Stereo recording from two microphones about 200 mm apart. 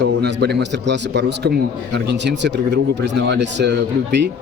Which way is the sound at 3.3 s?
60° right (ahead or behind).